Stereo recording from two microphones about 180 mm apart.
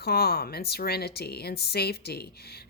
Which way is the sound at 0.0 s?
60° left (ahead or behind).